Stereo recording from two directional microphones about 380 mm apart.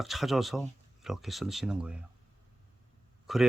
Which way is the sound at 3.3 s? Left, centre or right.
Centre.